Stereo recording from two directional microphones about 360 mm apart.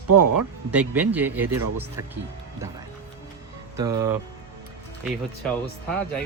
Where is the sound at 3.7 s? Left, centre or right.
Centre.